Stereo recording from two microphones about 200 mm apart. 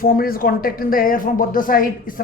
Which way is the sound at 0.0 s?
45° left (ahead or behind).